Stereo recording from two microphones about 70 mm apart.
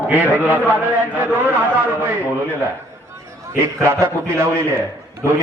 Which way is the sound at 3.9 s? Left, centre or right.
Right.